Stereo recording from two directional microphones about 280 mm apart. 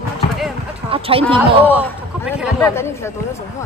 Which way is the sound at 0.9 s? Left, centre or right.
Centre.